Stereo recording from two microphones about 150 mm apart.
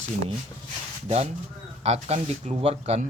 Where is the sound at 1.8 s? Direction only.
45° right (ahead or behind).